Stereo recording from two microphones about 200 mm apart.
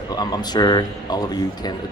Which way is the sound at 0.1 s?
20° left (ahead or behind).